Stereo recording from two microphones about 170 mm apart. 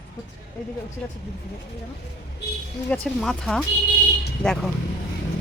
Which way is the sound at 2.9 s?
Centre (ahead or behind).